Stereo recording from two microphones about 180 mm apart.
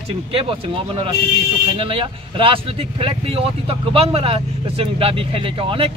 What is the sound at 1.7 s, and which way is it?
Speech, 30° right (ahead or behind).